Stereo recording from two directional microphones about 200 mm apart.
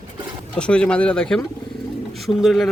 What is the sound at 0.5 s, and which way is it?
Speech, 5° left (ahead or behind).